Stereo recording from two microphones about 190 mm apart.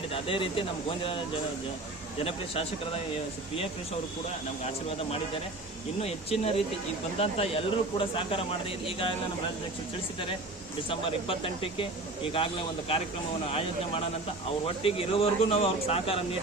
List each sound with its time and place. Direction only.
0.1 s speech: 30° left (ahead or behind)
6.0 s speech: 35° left (ahead or behind)
10.8 s speech: 30° left (ahead or behind)
13.5 s speech: 30° left (ahead or behind)